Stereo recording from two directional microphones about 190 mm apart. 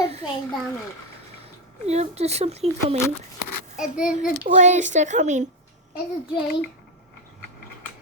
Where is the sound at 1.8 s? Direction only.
35° right (ahead or behind).